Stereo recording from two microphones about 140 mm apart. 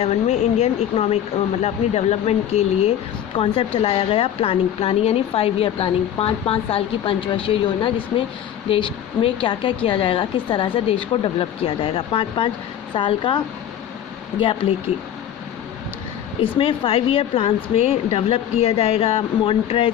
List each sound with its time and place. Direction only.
0.0 s a woman's voice: 50° left (ahead or behind)
16.4 s a woman's voice: 40° left (ahead or behind)